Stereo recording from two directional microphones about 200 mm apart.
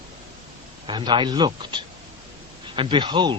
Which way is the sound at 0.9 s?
25° right (ahead or behind).